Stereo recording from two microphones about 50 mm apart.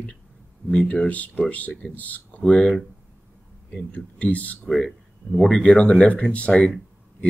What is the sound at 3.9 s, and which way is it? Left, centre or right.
Speech, left.